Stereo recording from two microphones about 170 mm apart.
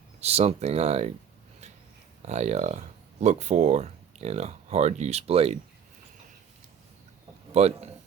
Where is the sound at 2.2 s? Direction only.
40° right (ahead or behind).